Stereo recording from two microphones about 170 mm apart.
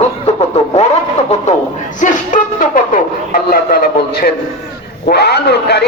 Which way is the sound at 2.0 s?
50° left (ahead or behind).